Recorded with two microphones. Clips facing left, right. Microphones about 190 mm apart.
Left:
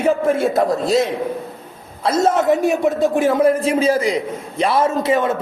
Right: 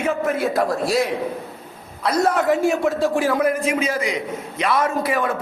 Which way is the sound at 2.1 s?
25° left (ahead or behind).